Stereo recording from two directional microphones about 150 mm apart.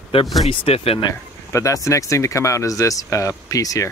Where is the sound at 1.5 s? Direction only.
20° left (ahead or behind).